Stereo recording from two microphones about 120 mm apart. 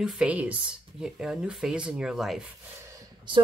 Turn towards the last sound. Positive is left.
turn(degrees=-25)  # may be behind; listen again after turning